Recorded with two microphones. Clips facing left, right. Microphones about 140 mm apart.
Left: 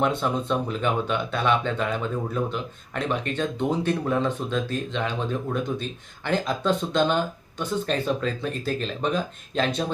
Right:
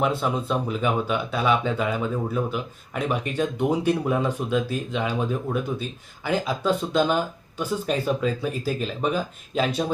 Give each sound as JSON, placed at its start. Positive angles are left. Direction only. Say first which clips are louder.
{"t": 0.0, "sound": "speech", "louder": "even", "side_deg": -5}